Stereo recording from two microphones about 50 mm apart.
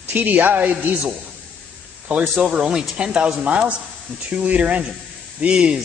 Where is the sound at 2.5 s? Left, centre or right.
Centre.